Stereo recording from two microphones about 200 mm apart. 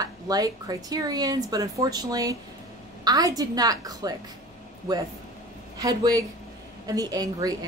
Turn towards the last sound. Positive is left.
turn(degrees=-20)  # may be behind; listen again after turning